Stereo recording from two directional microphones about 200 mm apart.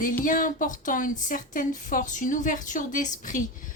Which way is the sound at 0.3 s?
40° left (ahead or behind).